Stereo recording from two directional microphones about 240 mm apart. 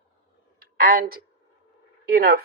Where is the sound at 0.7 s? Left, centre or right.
Right.